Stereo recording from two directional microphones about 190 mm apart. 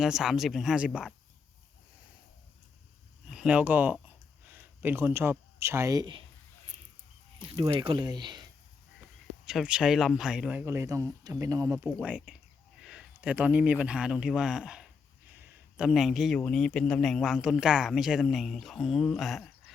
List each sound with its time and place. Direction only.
0.0 s speech: 5° right (ahead or behind)
3.2 s speech: 5° right (ahead or behind); by 6.2 s 25° right (ahead or behind)
7.6 s speech: 25° right (ahead or behind)
9.5 s a man's voice: 5° right (ahead or behind)